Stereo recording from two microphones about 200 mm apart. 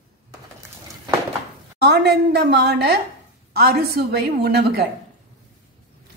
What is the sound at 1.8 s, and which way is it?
A woman's voice, 55° right (ahead or behind).